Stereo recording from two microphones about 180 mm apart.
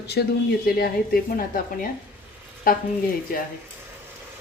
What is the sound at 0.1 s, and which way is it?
Speech, 60° left (ahead or behind).